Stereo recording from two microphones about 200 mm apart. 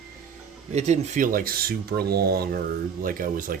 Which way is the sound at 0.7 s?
35° right (ahead or behind).